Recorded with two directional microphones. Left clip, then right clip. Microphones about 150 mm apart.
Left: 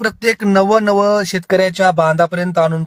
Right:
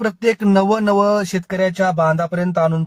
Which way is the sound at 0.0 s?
35° left (ahead or behind).